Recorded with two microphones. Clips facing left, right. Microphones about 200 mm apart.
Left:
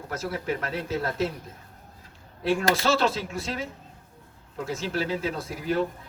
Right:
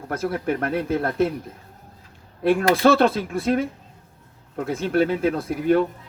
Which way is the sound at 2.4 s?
55° right (ahead or behind).